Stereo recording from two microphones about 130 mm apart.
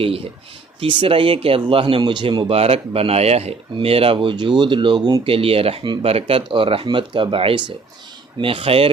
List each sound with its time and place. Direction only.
0.8 s speech: 40° right (ahead or behind)
5.3 s speech: 45° right (ahead or behind)